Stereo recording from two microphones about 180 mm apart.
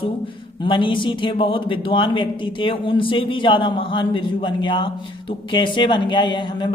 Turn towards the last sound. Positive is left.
turn(degrees=25)  # may be behind; listen again after turning